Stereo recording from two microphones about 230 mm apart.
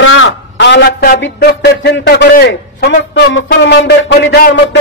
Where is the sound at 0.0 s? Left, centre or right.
Left.